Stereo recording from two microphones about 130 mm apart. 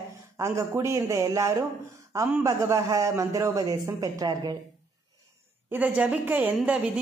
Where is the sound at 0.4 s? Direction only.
25° right (ahead or behind).